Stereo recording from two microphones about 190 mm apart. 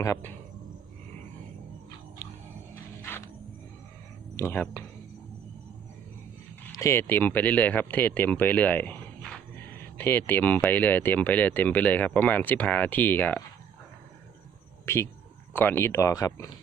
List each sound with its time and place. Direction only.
0.0 s speech: 15° left (ahead or behind)
2.2 s a sound: 10° left (ahead or behind)
3.0 s music: 15° left (ahead or behind)
4.4 s speech: 10° left (ahead or behind)
6.7 s speech: 15° left (ahead or behind)
14.8 s speech: 15° left (ahead or behind)